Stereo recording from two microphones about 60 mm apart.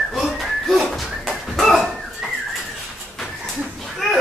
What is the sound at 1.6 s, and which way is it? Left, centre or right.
Dog, centre.